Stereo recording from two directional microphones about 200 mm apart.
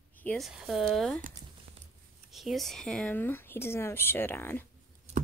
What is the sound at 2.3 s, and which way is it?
Speech, centre (ahead or behind).